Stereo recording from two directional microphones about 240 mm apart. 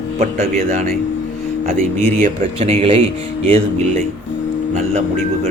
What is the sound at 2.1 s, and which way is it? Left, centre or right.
Speech, right.